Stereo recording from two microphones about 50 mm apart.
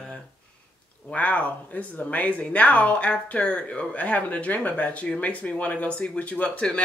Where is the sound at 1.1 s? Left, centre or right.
Left.